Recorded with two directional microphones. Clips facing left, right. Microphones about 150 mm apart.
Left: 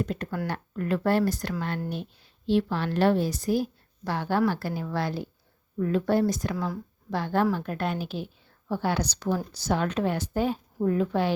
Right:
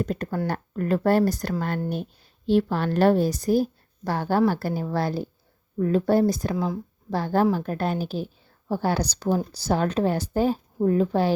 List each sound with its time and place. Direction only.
0.0 s a woman's voice: 40° right (ahead or behind)